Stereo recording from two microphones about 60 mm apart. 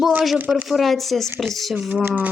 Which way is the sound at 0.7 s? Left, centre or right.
Centre.